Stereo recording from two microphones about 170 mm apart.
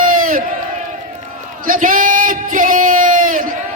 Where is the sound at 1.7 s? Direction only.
50° right (ahead or behind).